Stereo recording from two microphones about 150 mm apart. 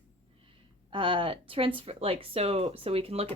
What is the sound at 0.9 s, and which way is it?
Speech, 35° right (ahead or behind).